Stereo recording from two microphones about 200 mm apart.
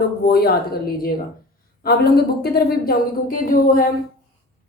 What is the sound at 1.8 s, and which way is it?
A woman's voice, 50° left (ahead or behind).